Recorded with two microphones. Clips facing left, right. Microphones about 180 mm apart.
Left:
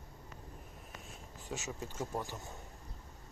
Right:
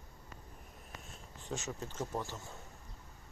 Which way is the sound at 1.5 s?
10° left (ahead or behind).